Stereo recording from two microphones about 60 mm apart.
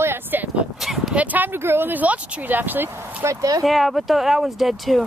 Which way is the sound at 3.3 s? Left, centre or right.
Right.